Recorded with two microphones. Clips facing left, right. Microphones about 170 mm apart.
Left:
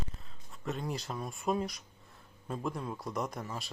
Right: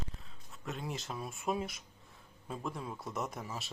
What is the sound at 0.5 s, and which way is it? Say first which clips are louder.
Speech: left 4 dB; centre (ahead or behind).